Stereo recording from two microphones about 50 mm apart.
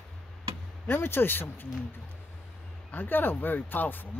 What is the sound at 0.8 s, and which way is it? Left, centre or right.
Speech, left.